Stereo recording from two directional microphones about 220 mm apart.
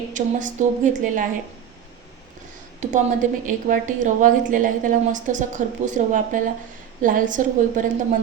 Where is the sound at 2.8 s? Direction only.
35° right (ahead or behind).